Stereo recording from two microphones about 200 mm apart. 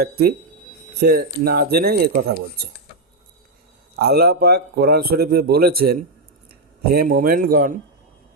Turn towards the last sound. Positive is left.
turn(degrees=-45)  # may be behind; listen again after turning